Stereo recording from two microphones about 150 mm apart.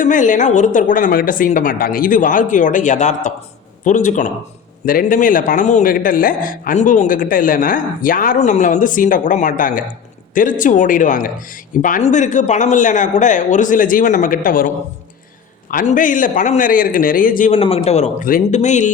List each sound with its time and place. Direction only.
0.0 s a man's voice: 60° left (ahead or behind)
4.9 s a man's voice: 70° left (ahead or behind)
15.7 s a man's voice: 65° left (ahead or behind)
17.5 s speech: 40° left (ahead or behind)
18.3 s speech: 60° left (ahead or behind)